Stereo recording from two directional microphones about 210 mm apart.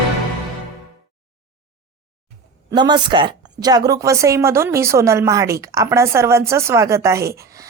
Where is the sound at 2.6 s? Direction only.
20° right (ahead or behind).